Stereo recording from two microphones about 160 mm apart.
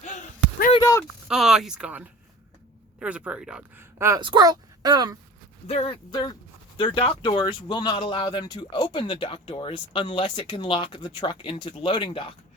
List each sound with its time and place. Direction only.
0.0 s a sound: 50° left (ahead or behind)
0.8 s speech: 20° left (ahead or behind)
1.3 s speech: 5° right (ahead or behind)
3.9 s speech: 20° right (ahead or behind)
5.6 s speech: 40° left (ahead or behind)